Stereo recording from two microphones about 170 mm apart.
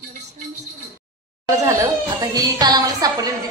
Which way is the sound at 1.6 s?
20° right (ahead or behind).